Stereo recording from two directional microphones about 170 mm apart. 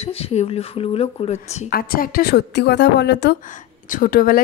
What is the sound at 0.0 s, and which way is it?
Speech, 35° left (ahead or behind).